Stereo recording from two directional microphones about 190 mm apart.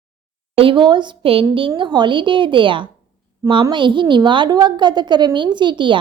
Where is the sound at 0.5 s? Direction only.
30° right (ahead or behind).